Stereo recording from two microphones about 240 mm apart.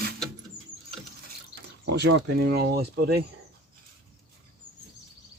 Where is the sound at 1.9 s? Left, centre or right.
Right.